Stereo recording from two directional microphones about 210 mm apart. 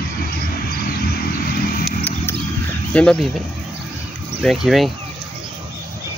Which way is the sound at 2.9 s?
5° left (ahead or behind).